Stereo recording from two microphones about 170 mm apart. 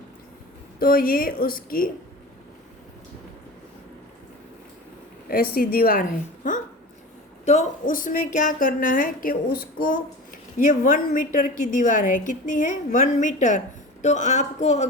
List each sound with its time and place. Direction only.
0.8 s a woman's voice: 60° left (ahead or behind)
5.3 s a woman's voice: 60° left (ahead or behind)
7.4 s a woman's voice: 40° left (ahead or behind)